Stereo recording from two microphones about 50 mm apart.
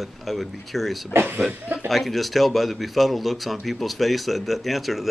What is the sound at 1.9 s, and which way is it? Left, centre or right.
Speech, centre.